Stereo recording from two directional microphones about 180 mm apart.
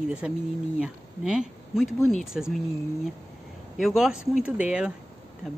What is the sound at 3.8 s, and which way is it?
Speech, centre (ahead or behind).